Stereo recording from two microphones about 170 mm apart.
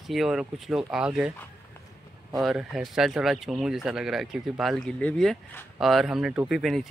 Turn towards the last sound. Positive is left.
turn(degrees=0)  # may be behind; listen again after turning